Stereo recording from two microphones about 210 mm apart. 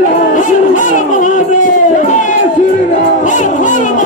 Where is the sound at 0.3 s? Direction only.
40° left (ahead or behind).